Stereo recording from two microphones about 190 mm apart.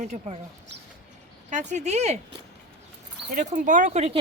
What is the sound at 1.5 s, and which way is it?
Speech, 40° right (ahead or behind).